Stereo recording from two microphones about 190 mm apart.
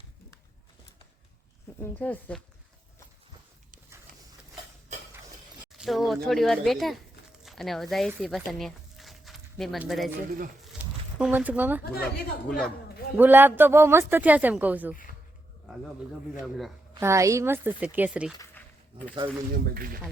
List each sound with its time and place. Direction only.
1.8 s speech: 10° left (ahead or behind)
4.1 s horse: 50° right (ahead or behind)
5.7 s speech: centre (ahead or behind)
8.5 s a sound: centre (ahead or behind)
11.2 s a man's voice: 10° right (ahead or behind)
11.8 s speech: 55° left (ahead or behind)
12.0 s speech: centre (ahead or behind)
13.1 s a man's voice: 10° right (ahead or behind)
17.0 s a man's voice: 15° right (ahead or behind)
18.6 s a sound: 10° left (ahead or behind)
19.2 s speech: 25° right (ahead or behind)
19.5 s speech: 50° right (ahead or behind)